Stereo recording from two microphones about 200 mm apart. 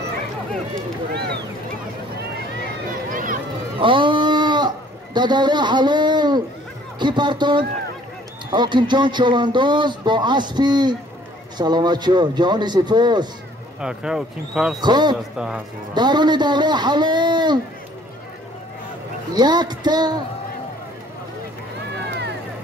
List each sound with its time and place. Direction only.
3.1 s a sound: 40° right (ahead or behind)
3.8 s a sound: 25° right (ahead or behind)
7.0 s a man's voice: 20° right (ahead or behind)
13.7 s speech: 5° right (ahead or behind)
14.8 s a man's voice: 20° right (ahead or behind)
15.3 s speech: 5° right (ahead or behind)
15.9 s a man's voice: 20° right (ahead or behind)
19.3 s a man's voice: 20° right (ahead or behind)